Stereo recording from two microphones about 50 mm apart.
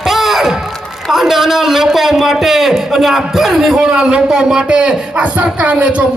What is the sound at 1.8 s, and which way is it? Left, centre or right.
A man's voice, centre.